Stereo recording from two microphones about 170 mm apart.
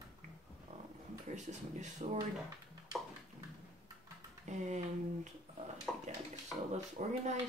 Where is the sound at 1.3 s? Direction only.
45° right (ahead or behind).